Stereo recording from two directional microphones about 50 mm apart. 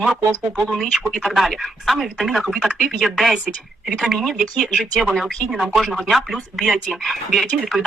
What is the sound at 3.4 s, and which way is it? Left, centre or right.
Speech, right.